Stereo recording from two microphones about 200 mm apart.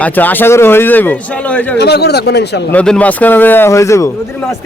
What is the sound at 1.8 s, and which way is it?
Speech, 55° left (ahead or behind).